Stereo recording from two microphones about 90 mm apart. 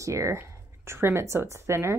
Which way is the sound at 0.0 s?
35° right (ahead or behind).